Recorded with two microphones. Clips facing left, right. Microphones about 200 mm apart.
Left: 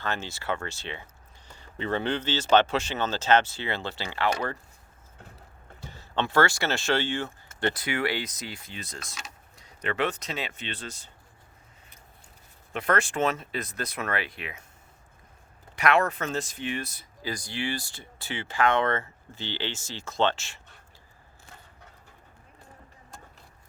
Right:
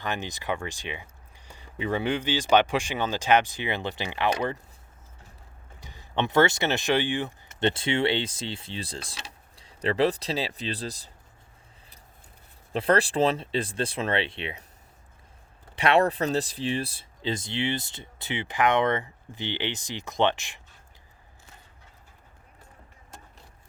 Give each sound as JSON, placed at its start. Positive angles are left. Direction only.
{"t": 0.0, "sound": "speech", "side_deg": -15}
{"t": 5.8, "sound": "speech", "side_deg": -15}
{"t": 12.7, "sound": "speech", "side_deg": -30}
{"t": 15.7, "sound": "speech", "side_deg": -30}